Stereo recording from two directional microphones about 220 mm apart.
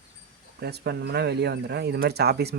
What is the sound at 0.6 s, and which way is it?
Speech, 50° right (ahead or behind).